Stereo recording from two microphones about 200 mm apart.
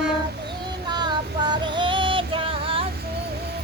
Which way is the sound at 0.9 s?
20° right (ahead or behind).